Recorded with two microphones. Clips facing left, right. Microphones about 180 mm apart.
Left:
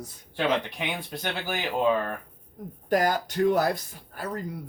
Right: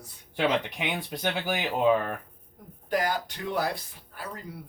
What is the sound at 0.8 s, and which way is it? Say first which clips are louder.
Speech: right 1 dB; 15° right (ahead or behind).